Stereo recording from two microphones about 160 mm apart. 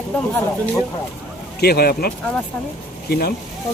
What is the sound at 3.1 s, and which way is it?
Speech, 75° left (ahead or behind).